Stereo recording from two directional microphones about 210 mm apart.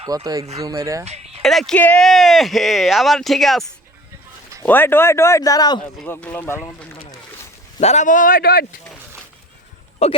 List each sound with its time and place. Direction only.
0.0 s speech: 20° right (ahead or behind)
1.0 s a sound: 30° right (ahead or behind)
1.4 s speech: centre (ahead or behind); by 5.8 s 20° left (ahead or behind)
6.0 s speech: 5° left (ahead or behind)
7.8 s speech: 35° left (ahead or behind)
10.0 s speech: 30° left (ahead or behind)